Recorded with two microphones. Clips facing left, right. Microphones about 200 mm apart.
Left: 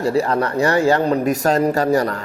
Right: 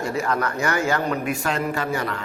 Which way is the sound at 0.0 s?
35° left (ahead or behind).